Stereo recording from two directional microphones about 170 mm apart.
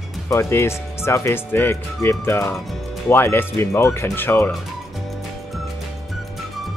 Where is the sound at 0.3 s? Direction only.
15° left (ahead or behind).